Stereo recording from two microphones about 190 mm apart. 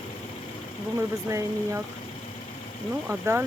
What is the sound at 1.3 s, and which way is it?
Speech, 15° right (ahead or behind).